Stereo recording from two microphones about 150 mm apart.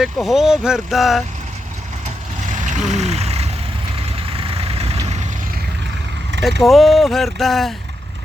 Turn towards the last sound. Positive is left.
turn(degrees=0)  # may be behind; listen again after turning